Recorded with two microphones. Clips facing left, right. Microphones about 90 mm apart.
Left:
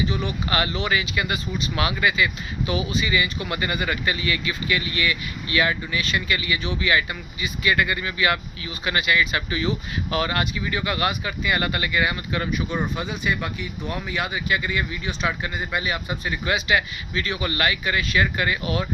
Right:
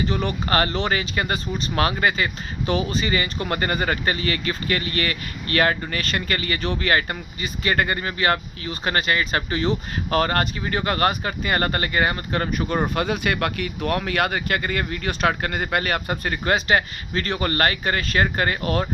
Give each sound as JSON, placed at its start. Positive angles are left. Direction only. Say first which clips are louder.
{"t": 0.0, "sound": "speech", "louder": "right 2 dB", "side_deg": -35}